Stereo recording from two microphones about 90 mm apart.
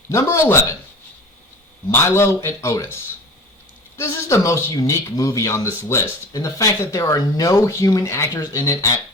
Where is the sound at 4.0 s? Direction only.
30° left (ahead or behind).